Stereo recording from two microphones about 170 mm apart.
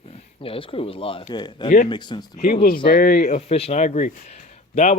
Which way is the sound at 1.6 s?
45° left (ahead or behind).